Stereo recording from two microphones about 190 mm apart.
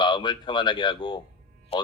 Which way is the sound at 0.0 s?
25° left (ahead or behind).